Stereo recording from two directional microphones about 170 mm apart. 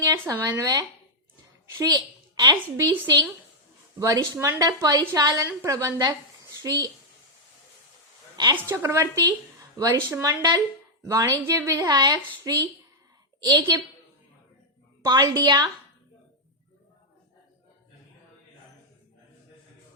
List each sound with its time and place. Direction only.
0.1 s a woman's voice: 20° right (ahead or behind)
4.0 s a woman's voice: 20° right (ahead or behind)
8.7 s a woman's voice: 15° right (ahead or behind)
15.0 s a woman's voice: 25° right (ahead or behind)